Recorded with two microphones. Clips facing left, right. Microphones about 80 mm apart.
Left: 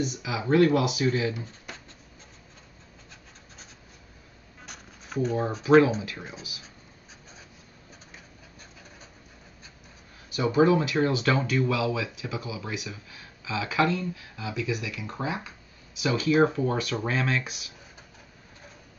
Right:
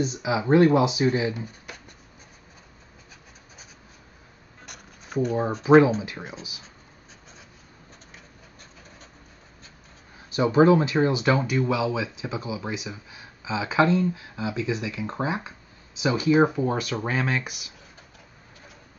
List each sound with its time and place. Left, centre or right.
0.0 s speech: right
5.2 s speech: centre
10.3 s speech: right